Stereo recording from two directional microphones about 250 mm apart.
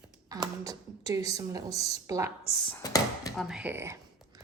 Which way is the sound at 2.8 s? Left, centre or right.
Centre.